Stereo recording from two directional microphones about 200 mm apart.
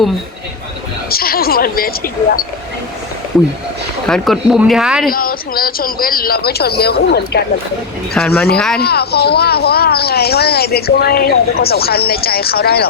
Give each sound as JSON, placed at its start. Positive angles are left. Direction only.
{"t": 1.1, "sound": "speech", "side_deg": 50}
{"t": 4.0, "sound": "speech", "side_deg": 0}
{"t": 5.1, "sound": "speech", "side_deg": 45}
{"t": 8.1, "sound": "speech", "side_deg": 5}
{"t": 8.8, "sound": "speech", "side_deg": 55}